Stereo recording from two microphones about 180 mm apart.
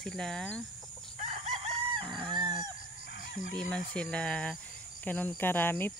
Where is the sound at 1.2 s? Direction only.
40° right (ahead or behind).